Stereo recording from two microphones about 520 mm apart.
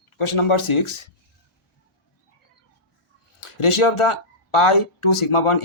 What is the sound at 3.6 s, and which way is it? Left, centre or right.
A man's voice, left.